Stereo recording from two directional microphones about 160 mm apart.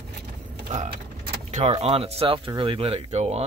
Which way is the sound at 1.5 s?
45° right (ahead or behind).